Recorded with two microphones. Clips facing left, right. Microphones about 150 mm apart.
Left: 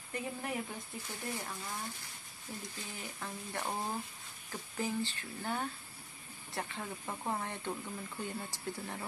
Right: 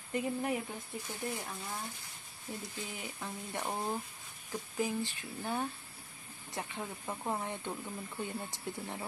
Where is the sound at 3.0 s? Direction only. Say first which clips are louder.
Right 1 dB; 15° right (ahead or behind).